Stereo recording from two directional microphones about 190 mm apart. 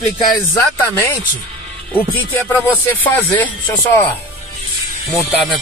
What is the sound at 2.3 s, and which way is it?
Speech, 10° left (ahead or behind).